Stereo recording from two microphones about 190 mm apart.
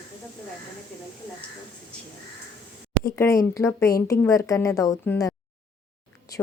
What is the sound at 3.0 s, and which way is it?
A woman's voice, 15° left (ahead or behind).